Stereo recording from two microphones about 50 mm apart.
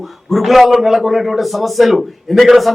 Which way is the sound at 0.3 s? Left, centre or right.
Centre.